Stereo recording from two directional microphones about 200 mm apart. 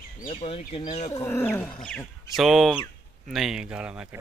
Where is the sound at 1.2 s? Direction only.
10° left (ahead or behind).